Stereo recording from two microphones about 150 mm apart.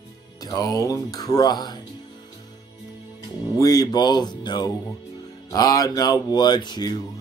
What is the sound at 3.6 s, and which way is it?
Mantra, 25° left (ahead or behind).